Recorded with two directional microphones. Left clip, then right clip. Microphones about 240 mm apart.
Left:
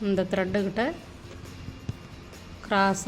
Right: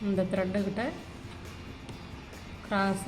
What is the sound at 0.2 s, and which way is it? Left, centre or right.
Speech, left.